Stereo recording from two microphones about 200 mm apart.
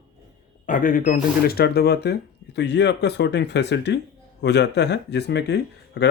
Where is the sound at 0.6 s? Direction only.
45° left (ahead or behind).